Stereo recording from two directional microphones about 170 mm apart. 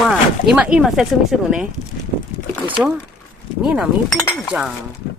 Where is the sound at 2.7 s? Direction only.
10° right (ahead or behind).